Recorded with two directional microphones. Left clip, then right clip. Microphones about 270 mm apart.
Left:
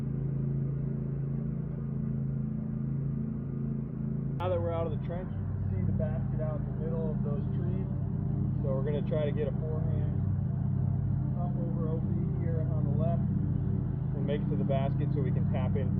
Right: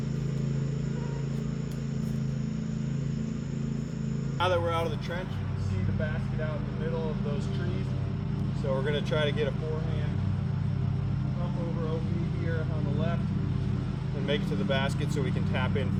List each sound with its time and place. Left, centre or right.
4.4 s vehicle: right
8.9 s speech: centre
14.3 s speech: centre